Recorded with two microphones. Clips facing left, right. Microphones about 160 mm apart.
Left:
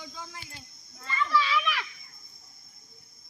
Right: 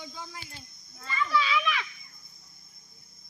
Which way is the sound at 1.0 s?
5° right (ahead or behind).